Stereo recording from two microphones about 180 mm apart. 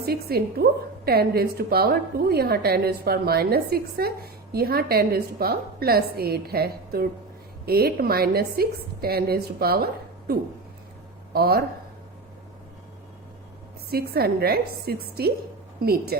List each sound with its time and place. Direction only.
0.0 s a woman's voice: 60° right (ahead or behind)
11.3 s a woman's voice: 55° right (ahead or behind)
13.9 s a woman's voice: 60° right (ahead or behind)